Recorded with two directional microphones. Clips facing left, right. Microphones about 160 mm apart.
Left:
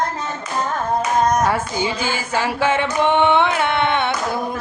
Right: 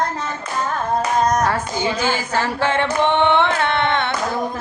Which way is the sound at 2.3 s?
10° left (ahead or behind).